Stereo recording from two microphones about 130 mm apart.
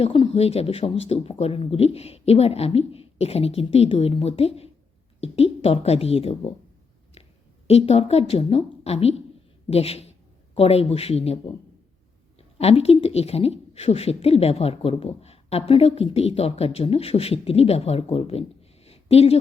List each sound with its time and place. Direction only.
0.0 s a woman's voice: 45° left (ahead or behind)
7.7 s a woman's voice: 50° left (ahead or behind)
12.4 s a woman's voice: 50° left (ahead or behind)
18.9 s a sound: 50° left (ahead or behind)